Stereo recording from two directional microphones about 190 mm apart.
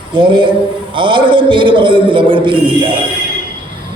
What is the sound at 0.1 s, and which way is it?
A man's voice, 25° right (ahead or behind).